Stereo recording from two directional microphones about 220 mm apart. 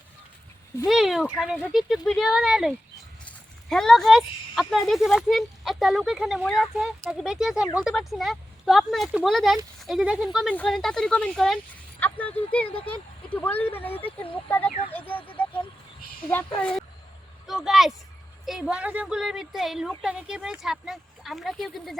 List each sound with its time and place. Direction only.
0.9 s speech: centre (ahead or behind)
16.6 s speech: 5° left (ahead or behind)